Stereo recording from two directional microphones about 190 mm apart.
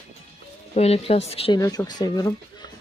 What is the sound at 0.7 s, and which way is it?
Speech, 35° left (ahead or behind).